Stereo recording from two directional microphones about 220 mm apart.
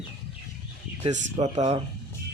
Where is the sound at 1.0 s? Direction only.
30° right (ahead or behind).